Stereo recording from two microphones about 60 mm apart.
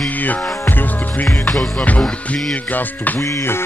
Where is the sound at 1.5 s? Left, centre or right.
Centre.